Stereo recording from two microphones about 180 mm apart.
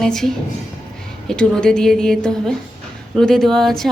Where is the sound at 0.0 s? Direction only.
5° left (ahead or behind).